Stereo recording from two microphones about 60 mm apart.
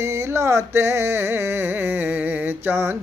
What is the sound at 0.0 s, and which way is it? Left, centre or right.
Music, right.